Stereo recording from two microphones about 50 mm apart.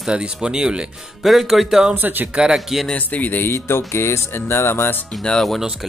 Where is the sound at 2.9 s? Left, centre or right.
Left.